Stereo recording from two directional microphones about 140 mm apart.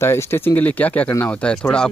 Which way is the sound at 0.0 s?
20° left (ahead or behind).